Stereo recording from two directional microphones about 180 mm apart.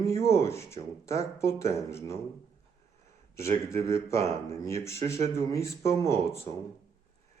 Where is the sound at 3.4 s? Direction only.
35° right (ahead or behind).